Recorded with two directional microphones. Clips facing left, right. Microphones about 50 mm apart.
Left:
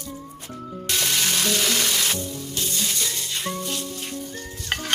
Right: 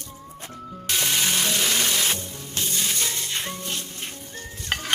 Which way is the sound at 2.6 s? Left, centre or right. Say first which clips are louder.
Right 1 dB; right.